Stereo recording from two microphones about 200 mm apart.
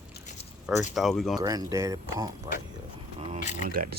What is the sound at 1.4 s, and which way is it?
Speech, 15° right (ahead or behind).